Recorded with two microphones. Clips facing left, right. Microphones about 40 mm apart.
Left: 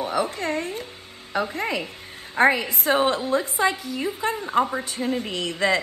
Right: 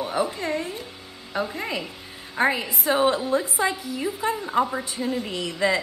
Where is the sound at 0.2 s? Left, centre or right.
Left.